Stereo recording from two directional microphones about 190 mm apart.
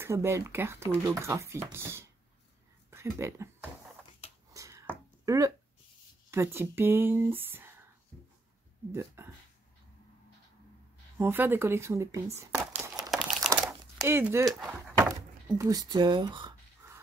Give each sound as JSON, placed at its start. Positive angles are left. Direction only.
{"t": 0.0, "sound": "speech", "side_deg": -15}
{"t": 4.6, "sound": "finger snapping", "side_deg": -15}
{"t": 5.2, "sound": "speech", "side_deg": -15}
{"t": 8.9, "sound": "speech", "side_deg": -15}
{"t": 11.1, "sound": "speech", "side_deg": -10}
{"t": 12.4, "sound": "crumpling", "side_deg": -10}
{"t": 14.0, "sound": "speech", "side_deg": -15}